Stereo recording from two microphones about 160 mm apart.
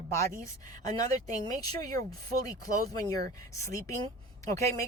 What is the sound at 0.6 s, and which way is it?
Speech, 25° left (ahead or behind).